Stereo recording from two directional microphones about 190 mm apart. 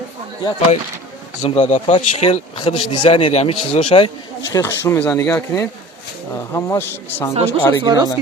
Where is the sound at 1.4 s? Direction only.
35° left (ahead or behind).